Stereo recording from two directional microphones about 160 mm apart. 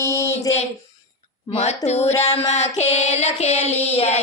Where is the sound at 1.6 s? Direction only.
40° left (ahead or behind).